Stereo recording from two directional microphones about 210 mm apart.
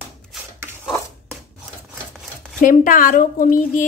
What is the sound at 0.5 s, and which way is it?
Dishes, 5° right (ahead or behind).